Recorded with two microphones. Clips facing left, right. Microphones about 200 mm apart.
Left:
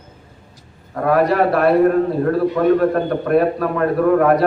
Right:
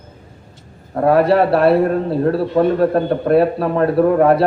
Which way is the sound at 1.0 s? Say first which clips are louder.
Right 2 dB; 30° right (ahead or behind).